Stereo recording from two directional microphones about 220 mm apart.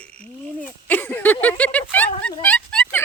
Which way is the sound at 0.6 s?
10° left (ahead or behind).